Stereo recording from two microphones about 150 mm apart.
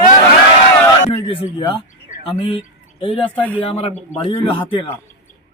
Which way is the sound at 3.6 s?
40° left (ahead or behind).